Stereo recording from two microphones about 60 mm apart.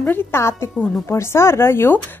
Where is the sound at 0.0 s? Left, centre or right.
Left.